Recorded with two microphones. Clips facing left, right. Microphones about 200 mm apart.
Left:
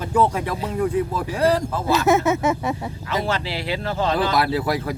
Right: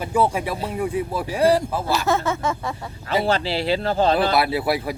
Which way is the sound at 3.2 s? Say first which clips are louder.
Right 4 dB; 30° right (ahead or behind).